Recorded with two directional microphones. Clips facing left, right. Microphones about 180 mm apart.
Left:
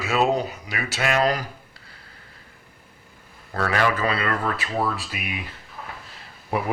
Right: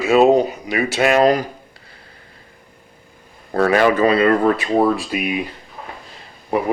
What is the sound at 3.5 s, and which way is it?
Speech, 25° right (ahead or behind).